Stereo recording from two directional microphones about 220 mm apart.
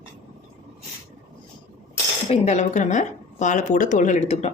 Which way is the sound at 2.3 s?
30° left (ahead or behind).